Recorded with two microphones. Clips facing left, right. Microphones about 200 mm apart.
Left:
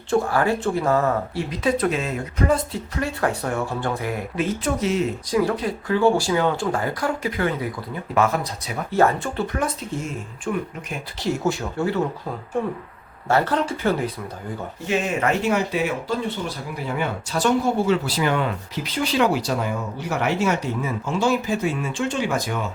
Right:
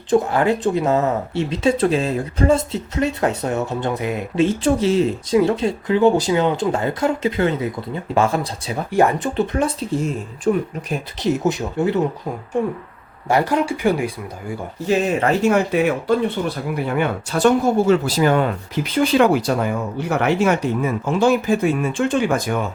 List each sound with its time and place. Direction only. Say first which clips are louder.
0.1 s speech: right 4 dB; 20° right (ahead or behind)
8.9 s speech: right 2 dB; 15° right (ahead or behind)
10.5 s speech: right 7 dB; 35° right (ahead or behind)
11.2 s speech: right 3 dB; 20° right (ahead or behind)
13.2 s speech: right 3 dB; 15° right (ahead or behind)
14.8 s speech: right 4 dB; 35° right (ahead or behind)
15.5 s speech: right 5 dB; 55° right (ahead or behind)